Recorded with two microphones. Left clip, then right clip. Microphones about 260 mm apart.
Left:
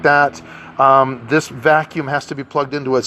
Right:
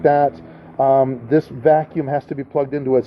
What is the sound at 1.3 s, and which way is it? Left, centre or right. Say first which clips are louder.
Speech: left 1 dB; centre.